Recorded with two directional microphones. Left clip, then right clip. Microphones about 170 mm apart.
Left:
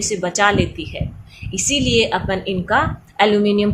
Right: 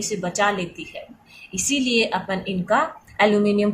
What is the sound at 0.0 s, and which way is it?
A woman's voice, 15° left (ahead or behind).